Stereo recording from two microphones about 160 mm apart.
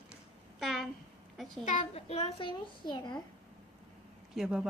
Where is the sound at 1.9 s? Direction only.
40° left (ahead or behind).